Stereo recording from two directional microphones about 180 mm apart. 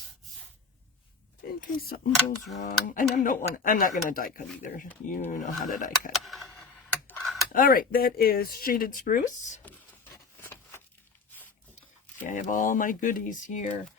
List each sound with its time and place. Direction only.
1.5 s speech: 50° left (ahead or behind)
6.1 s a sound: centre (ahead or behind)
7.1 s mechanisms: centre (ahead or behind)
7.5 s speech: 50° left (ahead or behind)
9.6 s a sound: 15° left (ahead or behind)
12.2 s speech: 45° left (ahead or behind)